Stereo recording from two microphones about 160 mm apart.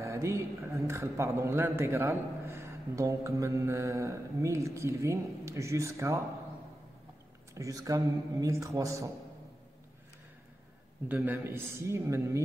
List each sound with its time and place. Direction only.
0.0 s a man's voice: 20° right (ahead or behind)
7.5 s a man's voice: 20° right (ahead or behind)
11.1 s a man's voice: 10° right (ahead or behind)